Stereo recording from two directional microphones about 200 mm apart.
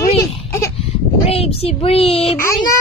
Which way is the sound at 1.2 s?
30° left (ahead or behind).